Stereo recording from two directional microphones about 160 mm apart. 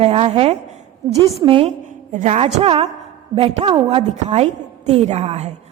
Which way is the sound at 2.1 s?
45° right (ahead or behind).